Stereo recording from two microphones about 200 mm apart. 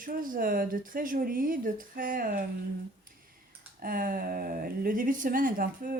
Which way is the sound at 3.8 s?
45° right (ahead or behind).